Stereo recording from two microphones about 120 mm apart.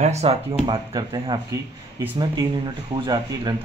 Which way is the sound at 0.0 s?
60° right (ahead or behind).